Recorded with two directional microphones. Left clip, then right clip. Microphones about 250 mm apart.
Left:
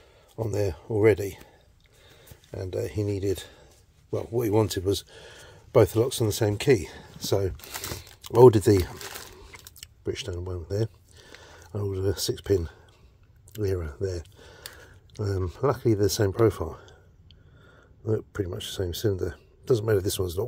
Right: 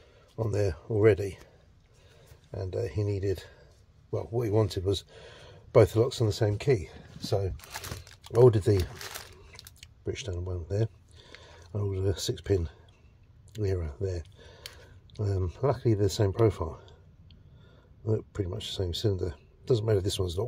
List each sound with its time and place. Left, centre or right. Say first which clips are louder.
0.4 s speech: left 2 dB; centre
2.5 s speech: left 2 dB; centre
9.8 s speech: left 4 dB; centre
18.0 s speech: left 3 dB; centre